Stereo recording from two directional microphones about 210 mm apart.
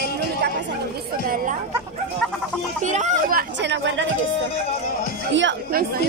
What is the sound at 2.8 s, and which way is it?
Chatter, 35° right (ahead or behind).